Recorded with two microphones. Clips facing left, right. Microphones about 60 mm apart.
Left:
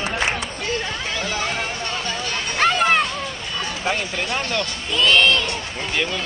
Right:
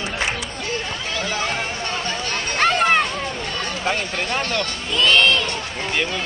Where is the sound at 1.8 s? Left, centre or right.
Right.